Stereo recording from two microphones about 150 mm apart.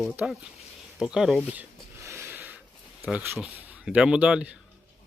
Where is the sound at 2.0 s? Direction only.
15° right (ahead or behind).